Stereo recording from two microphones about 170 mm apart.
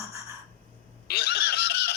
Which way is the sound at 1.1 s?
70° left (ahead or behind).